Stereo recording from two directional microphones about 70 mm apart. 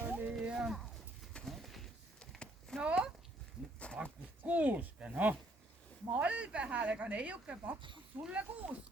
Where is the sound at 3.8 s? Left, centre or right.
Centre.